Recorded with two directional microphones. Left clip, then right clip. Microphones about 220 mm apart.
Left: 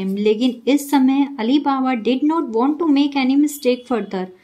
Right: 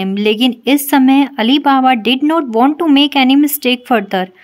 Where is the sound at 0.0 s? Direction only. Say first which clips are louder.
Right 4 dB; 25° right (ahead or behind).